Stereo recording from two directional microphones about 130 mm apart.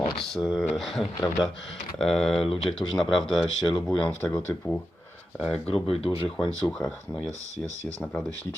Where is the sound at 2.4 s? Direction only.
45° left (ahead or behind).